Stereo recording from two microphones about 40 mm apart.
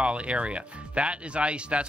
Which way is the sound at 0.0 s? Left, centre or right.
Right.